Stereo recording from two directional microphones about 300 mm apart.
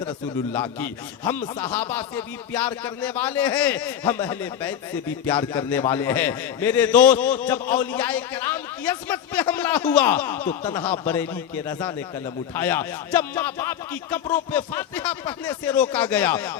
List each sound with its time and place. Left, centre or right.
0.5 s a man's voice: centre